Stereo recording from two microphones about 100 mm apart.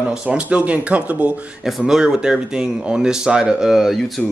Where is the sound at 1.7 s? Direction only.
5° right (ahead or behind).